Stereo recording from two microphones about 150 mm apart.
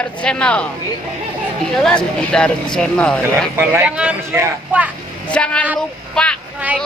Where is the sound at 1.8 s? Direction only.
5° left (ahead or behind).